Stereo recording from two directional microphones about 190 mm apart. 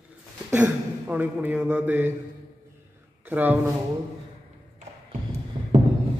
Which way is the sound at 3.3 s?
10° right (ahead or behind).